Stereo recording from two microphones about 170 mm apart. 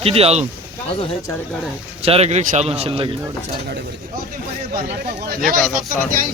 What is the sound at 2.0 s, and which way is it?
A man's voice, 35° right (ahead or behind).